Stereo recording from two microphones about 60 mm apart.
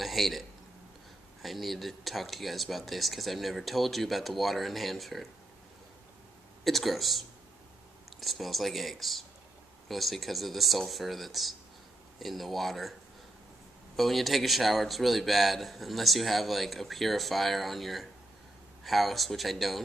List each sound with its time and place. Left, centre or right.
0.0 s a sound: centre
1.4 s a man's voice: centre
6.6 s a man's voice: centre
13.9 s a man's voice: centre